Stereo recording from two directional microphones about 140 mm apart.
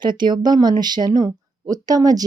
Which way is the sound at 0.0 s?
30° right (ahead or behind).